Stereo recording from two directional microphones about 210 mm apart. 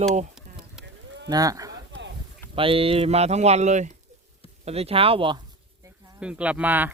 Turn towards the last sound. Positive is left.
turn(degrees=-10)  # may be behind; listen again after turning